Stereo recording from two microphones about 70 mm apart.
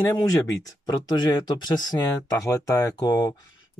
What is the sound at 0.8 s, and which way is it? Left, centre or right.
Speech, left.